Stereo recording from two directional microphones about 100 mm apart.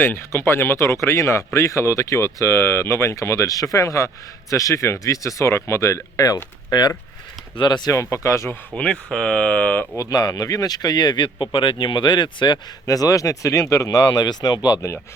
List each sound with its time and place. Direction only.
0.0 s speech: 20° left (ahead or behind); by 7.9 s 45° left (ahead or behind)
7.9 s speech: 30° left (ahead or behind)
8.7 s speech: 10° left (ahead or behind)
10.0 s speech: 40° left (ahead or behind)
12.8 s speech: 35° left (ahead or behind)